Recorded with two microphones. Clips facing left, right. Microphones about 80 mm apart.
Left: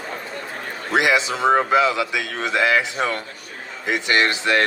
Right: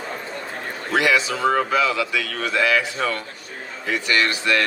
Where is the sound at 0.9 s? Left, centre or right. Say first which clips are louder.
Left 1 dB; left.